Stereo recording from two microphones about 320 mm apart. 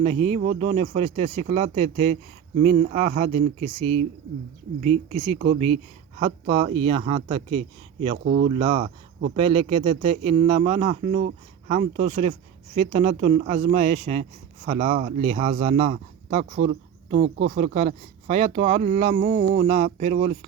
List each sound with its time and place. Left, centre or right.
0.0 s a man's voice: centre
8.2 s a man's voice: right